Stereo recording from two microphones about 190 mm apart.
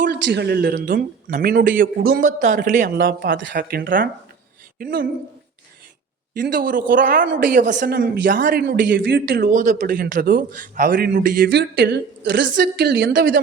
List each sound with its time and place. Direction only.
0.0 s a man's voice: 55° right (ahead or behind)
3.3 s speech: 70° right (ahead or behind)
3.6 s a man's voice: 50° right (ahead or behind)
6.3 s a man's voice: 65° right (ahead or behind)
6.6 s a man's voice: 45° right (ahead or behind)
9.0 s a man's voice: 70° right (ahead or behind)